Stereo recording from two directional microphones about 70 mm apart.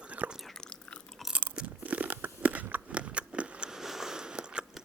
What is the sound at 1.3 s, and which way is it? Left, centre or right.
Crunch, centre.